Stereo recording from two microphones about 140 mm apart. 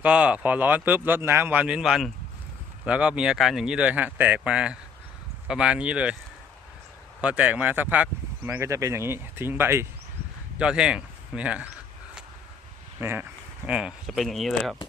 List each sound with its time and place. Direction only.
0.0 s speech: 10° right (ahead or behind)
7.2 s speech: 10° right (ahead or behind)
10.6 s speech: 5° right (ahead or behind)
13.0 s speech: 15° right (ahead or behind); by 14.8 s centre (ahead or behind)